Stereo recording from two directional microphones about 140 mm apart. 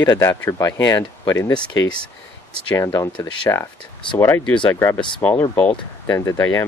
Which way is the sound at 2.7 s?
20° left (ahead or behind).